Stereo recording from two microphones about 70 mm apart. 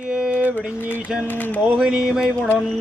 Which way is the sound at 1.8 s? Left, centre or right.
Centre.